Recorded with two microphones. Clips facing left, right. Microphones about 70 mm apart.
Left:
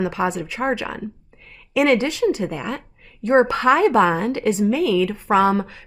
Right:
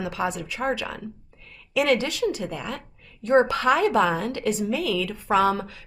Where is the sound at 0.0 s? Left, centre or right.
Left.